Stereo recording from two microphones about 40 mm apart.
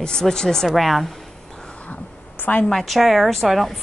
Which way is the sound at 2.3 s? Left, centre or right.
Left.